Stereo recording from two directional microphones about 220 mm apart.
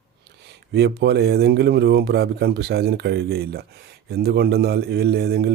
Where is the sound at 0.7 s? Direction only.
50° right (ahead or behind).